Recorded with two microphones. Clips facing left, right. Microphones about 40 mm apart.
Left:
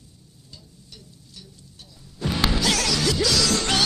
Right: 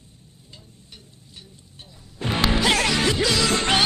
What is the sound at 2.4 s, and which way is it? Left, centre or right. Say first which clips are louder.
Music: right 4 dB; right.